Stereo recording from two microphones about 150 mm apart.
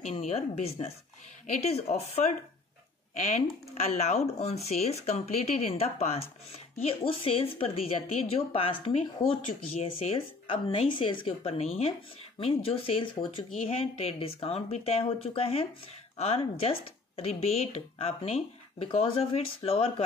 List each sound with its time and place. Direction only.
0.0 s speech: 45° left (ahead or behind)